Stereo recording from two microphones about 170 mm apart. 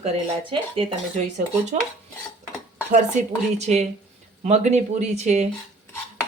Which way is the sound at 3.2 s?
45° right (ahead or behind).